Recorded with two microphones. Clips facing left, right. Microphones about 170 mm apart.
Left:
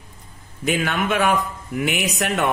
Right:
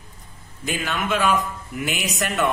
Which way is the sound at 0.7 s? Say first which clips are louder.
Left 4 dB; 60° left (ahead or behind).